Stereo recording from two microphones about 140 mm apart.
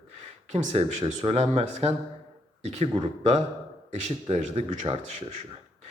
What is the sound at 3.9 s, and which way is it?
A man's voice, 50° right (ahead or behind).